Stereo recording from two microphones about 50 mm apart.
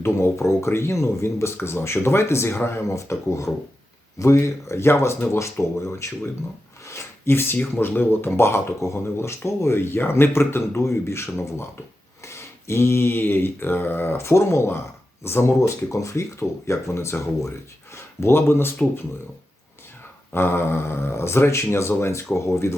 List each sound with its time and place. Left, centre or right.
0.0 s speech: left
2.9 s speech: left
6.8 s rub: left
7.5 s speech: left
12.2 s mantra: left
14.2 s speech: left
15.6 s speech: left
17.9 s speech: left
20.3 s speech: left